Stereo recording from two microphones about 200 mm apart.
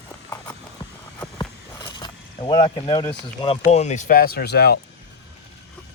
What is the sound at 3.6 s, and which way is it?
Speech, 35° left (ahead or behind).